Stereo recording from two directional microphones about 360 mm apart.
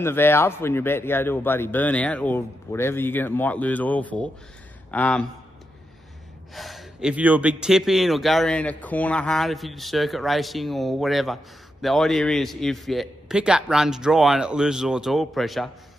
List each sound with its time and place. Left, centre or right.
0.0 s speech: centre
6.5 s speech: centre